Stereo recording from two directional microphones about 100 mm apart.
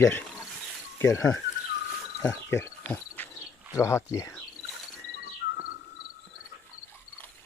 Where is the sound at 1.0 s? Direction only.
30° left (ahead or behind).